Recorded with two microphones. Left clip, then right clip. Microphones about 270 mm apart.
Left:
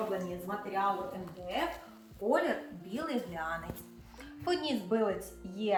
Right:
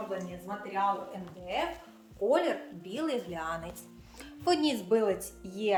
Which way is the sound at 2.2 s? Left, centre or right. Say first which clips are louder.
Right 3 dB; right.